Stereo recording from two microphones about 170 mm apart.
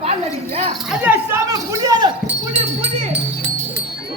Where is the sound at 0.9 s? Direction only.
10° right (ahead or behind).